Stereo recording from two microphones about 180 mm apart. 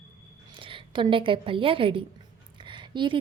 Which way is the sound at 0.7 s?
30° right (ahead or behind).